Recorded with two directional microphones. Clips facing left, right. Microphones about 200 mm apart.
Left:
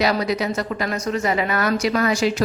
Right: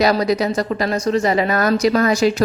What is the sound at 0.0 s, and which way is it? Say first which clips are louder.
A woman's voice: right 4 dB; 40° right (ahead or behind).